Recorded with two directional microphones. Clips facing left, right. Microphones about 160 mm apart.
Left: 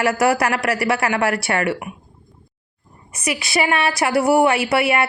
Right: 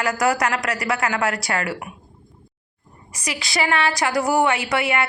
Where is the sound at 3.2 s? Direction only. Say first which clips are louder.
Left 3 dB; 20° left (ahead or behind).